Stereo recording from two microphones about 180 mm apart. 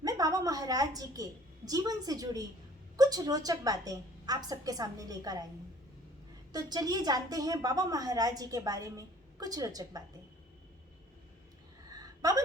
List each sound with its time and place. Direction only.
0.0 s a woman's voice: 20° right (ahead or behind)
6.5 s a woman's voice: 20° right (ahead or behind)
11.9 s a sound: 20° right (ahead or behind)